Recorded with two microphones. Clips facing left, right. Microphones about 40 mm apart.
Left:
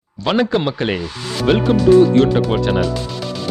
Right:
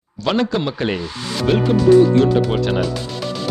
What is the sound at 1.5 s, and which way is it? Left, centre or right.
Speech, left.